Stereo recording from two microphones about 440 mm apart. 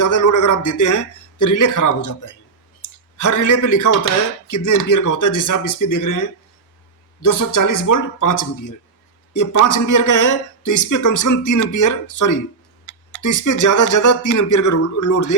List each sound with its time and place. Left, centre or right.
0.0 s speech: left